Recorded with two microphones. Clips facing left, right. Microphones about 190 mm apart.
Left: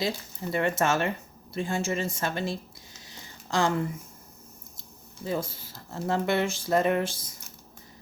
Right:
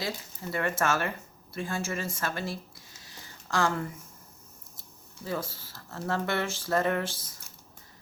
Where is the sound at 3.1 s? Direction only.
20° left (ahead or behind).